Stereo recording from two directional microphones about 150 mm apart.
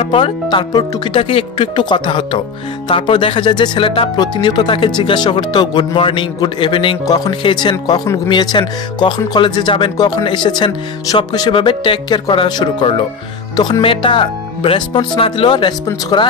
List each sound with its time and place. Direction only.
0.0 s speech: 35° left (ahead or behind)